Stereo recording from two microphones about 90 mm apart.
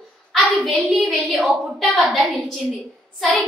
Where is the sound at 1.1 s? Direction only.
5° right (ahead or behind).